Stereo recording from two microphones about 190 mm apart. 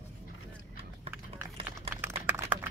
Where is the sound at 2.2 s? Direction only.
10° right (ahead or behind).